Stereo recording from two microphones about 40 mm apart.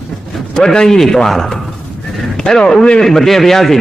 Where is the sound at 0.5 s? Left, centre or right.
Centre.